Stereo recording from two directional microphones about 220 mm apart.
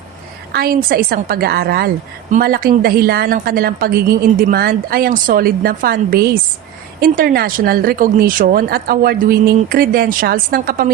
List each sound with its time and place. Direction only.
0.5 s a woman's voice: 45° right (ahead or behind)